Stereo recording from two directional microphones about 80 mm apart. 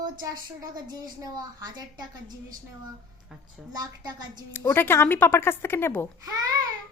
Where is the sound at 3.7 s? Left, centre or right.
Right.